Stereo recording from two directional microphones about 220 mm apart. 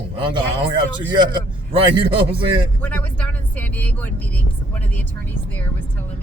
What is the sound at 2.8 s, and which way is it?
Speech, 5° left (ahead or behind).